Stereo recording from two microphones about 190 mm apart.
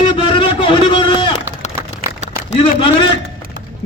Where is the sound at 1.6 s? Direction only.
35° left (ahead or behind).